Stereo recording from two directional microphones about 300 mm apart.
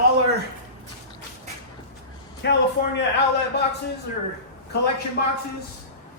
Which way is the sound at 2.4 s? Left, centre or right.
Left.